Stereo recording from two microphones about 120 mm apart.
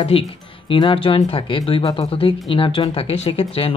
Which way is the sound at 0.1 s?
50° left (ahead or behind).